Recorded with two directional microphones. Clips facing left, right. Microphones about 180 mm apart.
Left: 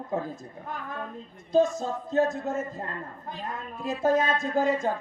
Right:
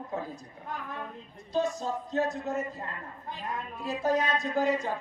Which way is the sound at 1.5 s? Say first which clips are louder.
Left 6 dB; 45° left (ahead or behind).